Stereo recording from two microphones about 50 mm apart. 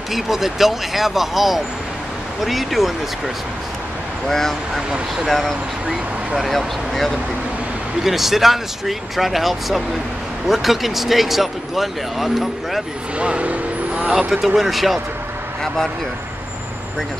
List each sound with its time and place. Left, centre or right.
0.1 s speech: centre
4.3 s speech: centre
5.9 s speech: centre
13.2 s vehicle: right
14.1 s speech: centre